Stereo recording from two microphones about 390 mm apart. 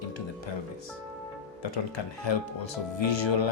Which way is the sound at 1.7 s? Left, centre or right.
Left.